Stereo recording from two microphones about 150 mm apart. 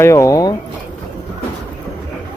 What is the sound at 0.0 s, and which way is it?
Speech, 20° left (ahead or behind).